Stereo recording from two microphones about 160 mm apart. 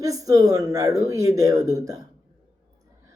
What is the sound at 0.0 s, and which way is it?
Speech, 20° right (ahead or behind).